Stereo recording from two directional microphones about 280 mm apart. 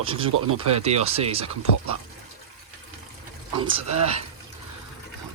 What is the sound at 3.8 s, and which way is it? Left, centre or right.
Speech, right.